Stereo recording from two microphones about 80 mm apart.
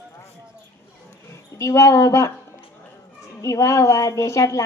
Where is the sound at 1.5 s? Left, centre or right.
Left.